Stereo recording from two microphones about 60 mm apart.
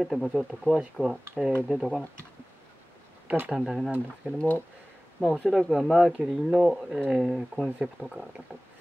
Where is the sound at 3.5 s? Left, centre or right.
Centre.